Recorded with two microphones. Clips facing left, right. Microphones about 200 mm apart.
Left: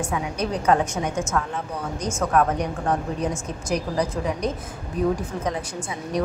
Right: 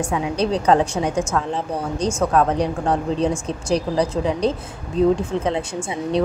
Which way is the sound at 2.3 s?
30° right (ahead or behind).